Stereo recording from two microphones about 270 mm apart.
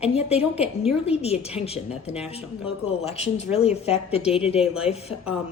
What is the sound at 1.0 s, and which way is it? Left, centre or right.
Speech, left.